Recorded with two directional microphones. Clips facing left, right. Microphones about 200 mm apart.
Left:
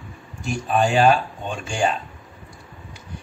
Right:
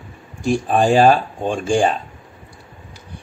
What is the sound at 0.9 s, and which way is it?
A man's voice, 35° right (ahead or behind).